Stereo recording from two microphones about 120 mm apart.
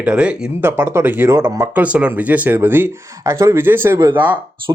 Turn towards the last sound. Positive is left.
turn(degrees=-20)  # may be behind; listen again after turning